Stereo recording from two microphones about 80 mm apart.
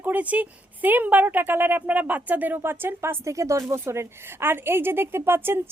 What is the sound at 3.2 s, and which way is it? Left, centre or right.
Speech, right.